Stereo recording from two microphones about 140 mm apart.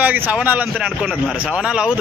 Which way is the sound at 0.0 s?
10° right (ahead or behind).